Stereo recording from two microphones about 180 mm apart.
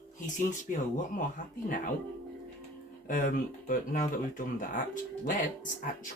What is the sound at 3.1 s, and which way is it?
Speech, 50° left (ahead or behind).